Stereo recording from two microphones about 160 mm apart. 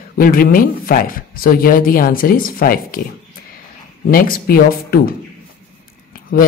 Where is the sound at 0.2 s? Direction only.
65° left (ahead or behind).